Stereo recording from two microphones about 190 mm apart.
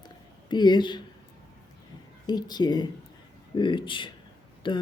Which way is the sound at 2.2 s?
20° left (ahead or behind).